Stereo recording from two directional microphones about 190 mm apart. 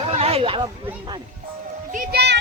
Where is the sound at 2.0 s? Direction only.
60° right (ahead or behind).